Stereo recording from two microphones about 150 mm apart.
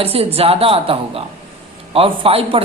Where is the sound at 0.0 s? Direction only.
40° right (ahead or behind).